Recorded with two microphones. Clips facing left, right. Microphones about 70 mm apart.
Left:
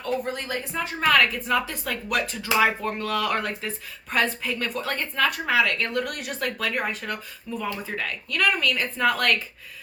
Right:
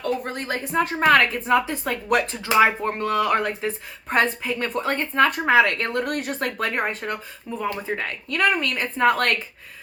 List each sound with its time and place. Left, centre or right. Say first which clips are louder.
0.0 s speech: right 2 dB; right
1.0 s speech: right 2 dB; right
2.0 s speech: right 6 dB; right
2.4 s speech: right 2 dB; right
4.7 s speech: right 5 dB; right
7.6 s speech: right 4 dB; right